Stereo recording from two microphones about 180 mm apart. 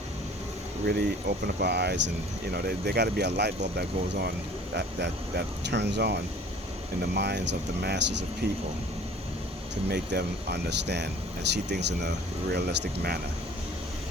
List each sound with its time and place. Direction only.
0.9 s speech: 60° right (ahead or behind)
9.9 s speech: 65° right (ahead or behind)